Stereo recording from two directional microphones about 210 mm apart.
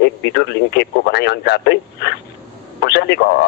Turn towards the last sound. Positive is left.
turn(degrees=50)  # may be behind; listen again after turning